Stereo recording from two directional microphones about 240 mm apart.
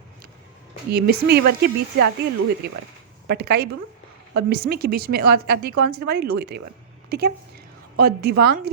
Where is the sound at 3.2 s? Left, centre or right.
Right.